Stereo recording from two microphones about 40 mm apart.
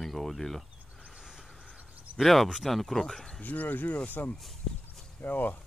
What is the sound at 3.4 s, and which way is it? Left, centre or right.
Speech, left.